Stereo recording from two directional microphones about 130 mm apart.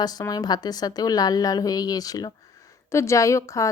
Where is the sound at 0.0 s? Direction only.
30° left (ahead or behind).